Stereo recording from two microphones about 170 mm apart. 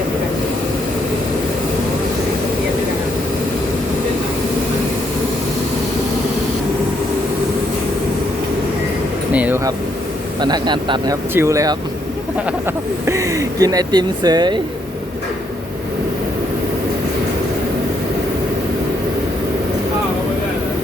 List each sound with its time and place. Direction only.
9.3 s air conditioning: 10° right (ahead or behind)
10.4 s speech: 25° right (ahead or behind)